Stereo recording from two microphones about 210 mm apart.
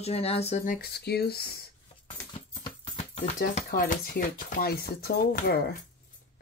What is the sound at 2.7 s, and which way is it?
Speech, 30° left (ahead or behind).